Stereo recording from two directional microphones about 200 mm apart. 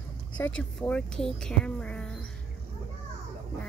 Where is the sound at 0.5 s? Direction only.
5° left (ahead or behind).